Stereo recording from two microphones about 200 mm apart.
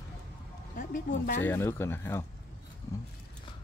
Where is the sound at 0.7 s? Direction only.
45° left (ahead or behind).